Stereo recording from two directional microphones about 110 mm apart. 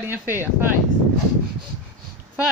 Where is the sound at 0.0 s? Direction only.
20° right (ahead or behind).